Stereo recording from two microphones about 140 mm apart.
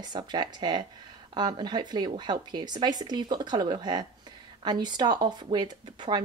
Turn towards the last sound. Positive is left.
turn(degrees=-30)  # may be behind; listen again after turning